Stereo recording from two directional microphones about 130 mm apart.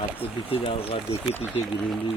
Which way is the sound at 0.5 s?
50° left (ahead or behind).